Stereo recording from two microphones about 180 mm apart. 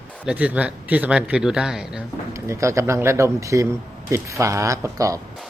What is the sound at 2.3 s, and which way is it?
Speech, 15° right (ahead or behind).